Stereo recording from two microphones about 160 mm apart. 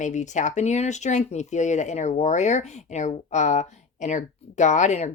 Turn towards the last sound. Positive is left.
turn(degrees=45)  # may be behind; listen again after turning